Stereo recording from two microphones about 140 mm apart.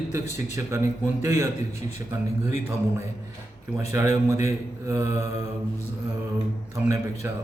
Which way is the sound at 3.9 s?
20° right (ahead or behind).